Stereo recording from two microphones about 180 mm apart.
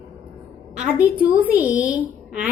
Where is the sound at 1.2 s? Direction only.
10° right (ahead or behind).